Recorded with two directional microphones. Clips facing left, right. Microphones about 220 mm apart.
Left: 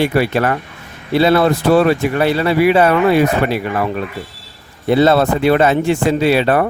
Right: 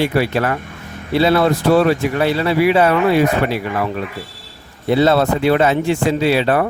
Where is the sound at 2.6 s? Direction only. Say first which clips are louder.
Left 2 dB; 55° left (ahead or behind).